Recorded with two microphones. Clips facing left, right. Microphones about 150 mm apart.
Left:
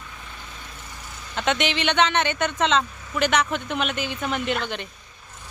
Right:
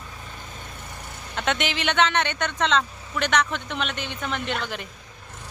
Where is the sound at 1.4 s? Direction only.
Centre (ahead or behind).